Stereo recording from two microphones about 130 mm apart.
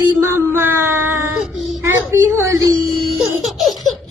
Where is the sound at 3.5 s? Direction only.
Centre (ahead or behind).